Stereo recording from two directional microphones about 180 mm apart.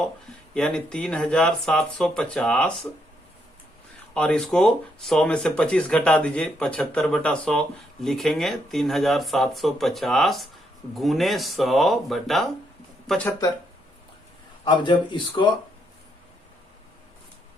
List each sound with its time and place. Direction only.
0.5 s speech: 5° left (ahead or behind)
4.1 s speech: 5° left (ahead or behind)
14.6 s speech: 25° left (ahead or behind)